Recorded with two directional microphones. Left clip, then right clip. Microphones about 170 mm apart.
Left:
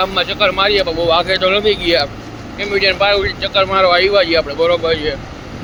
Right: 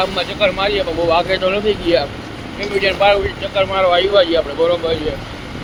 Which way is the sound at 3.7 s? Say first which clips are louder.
Left 1 dB; 30° left (ahead or behind).